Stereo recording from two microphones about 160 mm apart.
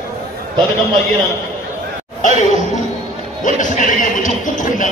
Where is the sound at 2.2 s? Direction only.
50° left (ahead or behind).